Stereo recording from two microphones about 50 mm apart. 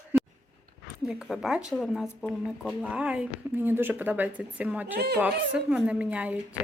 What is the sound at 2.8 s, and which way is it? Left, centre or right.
Speech, right.